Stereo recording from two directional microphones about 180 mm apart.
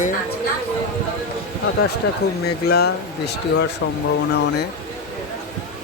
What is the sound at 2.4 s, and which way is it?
Speech, 60° left (ahead or behind).